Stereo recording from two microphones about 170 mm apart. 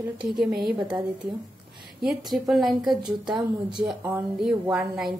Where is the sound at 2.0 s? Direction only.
Centre (ahead or behind).